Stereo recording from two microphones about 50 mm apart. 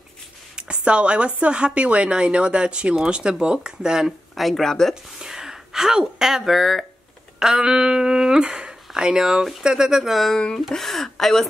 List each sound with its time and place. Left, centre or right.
0.6 s speech: right
4.4 s speech: centre
5.2 s speech: centre
7.3 s speech: centre
10.1 s speech: centre